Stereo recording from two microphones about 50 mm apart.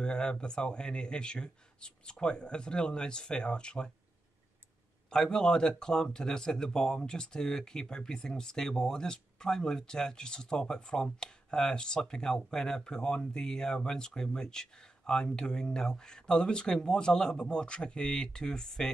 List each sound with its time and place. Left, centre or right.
0.0 s speech: centre
5.1 s speech: centre